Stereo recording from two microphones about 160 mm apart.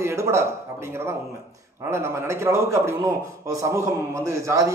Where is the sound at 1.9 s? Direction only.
15° right (ahead or behind).